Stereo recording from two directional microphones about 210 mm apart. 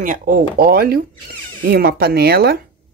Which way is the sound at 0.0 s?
40° right (ahead or behind).